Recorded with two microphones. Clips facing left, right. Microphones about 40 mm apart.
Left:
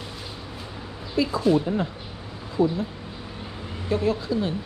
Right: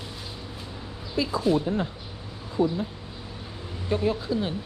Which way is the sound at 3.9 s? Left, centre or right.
Centre.